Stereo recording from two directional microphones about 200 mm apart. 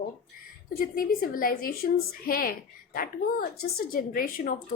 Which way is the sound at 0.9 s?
45° left (ahead or behind).